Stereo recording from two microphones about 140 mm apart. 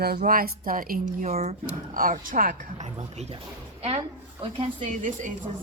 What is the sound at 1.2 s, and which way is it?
Speech, 50° right (ahead or behind).